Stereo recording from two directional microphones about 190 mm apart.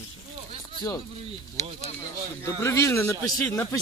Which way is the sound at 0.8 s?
25° left (ahead or behind).